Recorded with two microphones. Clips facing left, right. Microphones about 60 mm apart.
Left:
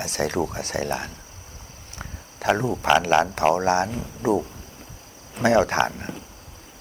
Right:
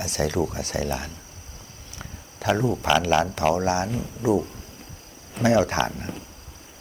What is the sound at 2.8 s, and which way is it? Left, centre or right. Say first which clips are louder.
Speech: left 3 dB; left.